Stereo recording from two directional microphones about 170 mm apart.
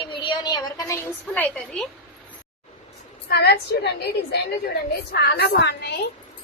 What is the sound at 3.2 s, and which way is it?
A woman's voice, 70° left (ahead or behind).